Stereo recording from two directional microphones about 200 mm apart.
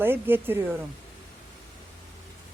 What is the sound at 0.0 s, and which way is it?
Speech, 10° right (ahead or behind).